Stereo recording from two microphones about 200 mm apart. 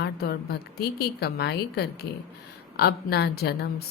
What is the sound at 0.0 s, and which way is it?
A woman's voice, 50° left (ahead or behind).